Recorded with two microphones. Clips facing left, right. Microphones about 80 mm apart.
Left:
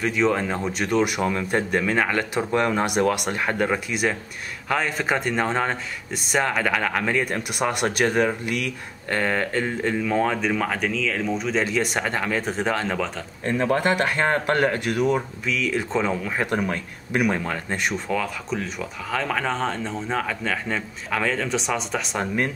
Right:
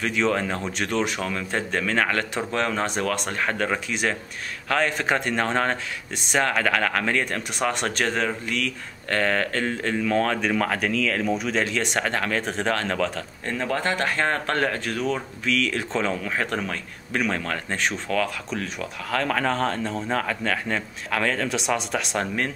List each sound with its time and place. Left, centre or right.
0.0 s speech: centre
13.5 s speech: left
15.4 s speech: centre
22.2 s speech: centre